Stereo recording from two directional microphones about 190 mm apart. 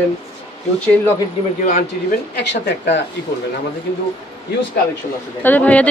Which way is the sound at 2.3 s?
65° left (ahead or behind).